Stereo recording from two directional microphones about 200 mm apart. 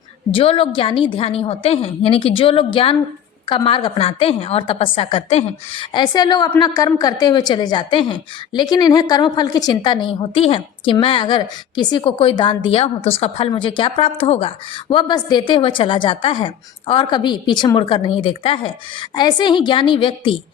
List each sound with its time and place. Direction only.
0.3 s a woman's voice: 25° left (ahead or behind)